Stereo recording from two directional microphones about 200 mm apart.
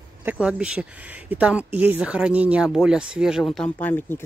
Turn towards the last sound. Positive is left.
turn(degrees=10)  # may be behind; listen again after turning